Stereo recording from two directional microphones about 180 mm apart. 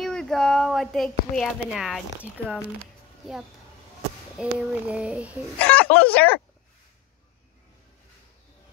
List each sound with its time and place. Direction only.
0.0 s a woman's voice: 5° left (ahead or behind)
2.8 s a sound: centre (ahead or behind)
4.4 s child singing: 5° right (ahead or behind)
5.6 s speech: 10° left (ahead or behind)